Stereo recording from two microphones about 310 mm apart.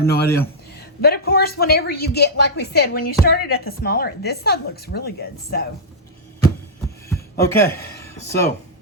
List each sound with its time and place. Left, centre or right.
0.0 s speech: left
7.1 s a sound: centre
8.2 s speech: centre